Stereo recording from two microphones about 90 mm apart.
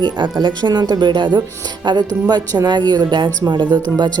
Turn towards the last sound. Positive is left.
turn(degrees=-55)  # may be behind; listen again after turning